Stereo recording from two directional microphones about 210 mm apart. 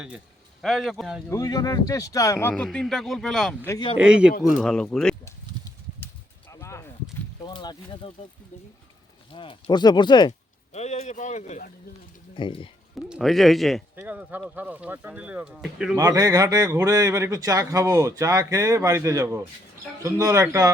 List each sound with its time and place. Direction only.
0.6 s speech: centre (ahead or behind)
1.3 s speech: 15° left (ahead or behind)
3.7 s speech: 20° left (ahead or behind)
3.9 s speech: 5° right (ahead or behind)
6.5 s a sound: 15° left (ahead or behind)
7.4 s speech: 20° left (ahead or behind)
9.3 s speech: 25° left (ahead or behind)
10.7 s speech: 30° left (ahead or behind)
13.1 s speech: centre (ahead or behind)
16.0 s speech: 15° right (ahead or behind)